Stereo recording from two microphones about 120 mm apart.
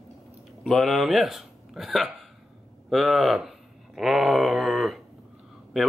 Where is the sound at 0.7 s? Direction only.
Centre (ahead or behind).